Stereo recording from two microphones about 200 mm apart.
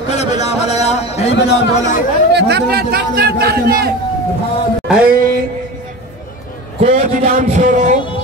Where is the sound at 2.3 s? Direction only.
55° right (ahead or behind).